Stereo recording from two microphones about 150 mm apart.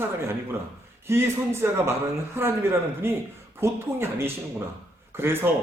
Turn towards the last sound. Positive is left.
turn(degrees=-15)  # may be behind; listen again after turning